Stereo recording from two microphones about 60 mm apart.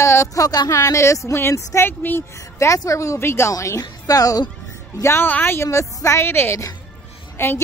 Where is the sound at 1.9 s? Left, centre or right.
Left.